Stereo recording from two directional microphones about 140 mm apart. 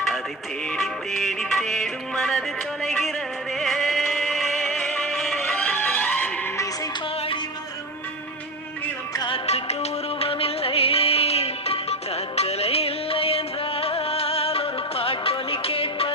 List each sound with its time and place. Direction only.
0.8 s music: centre (ahead or behind)
9.1 s music: 35° left (ahead or behind)
9.5 s music: 50° left (ahead or behind)